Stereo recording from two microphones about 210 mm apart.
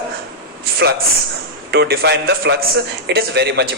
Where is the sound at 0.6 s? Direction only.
50° right (ahead or behind).